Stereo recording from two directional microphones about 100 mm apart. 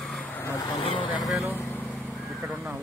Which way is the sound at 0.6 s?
60° left (ahead or behind).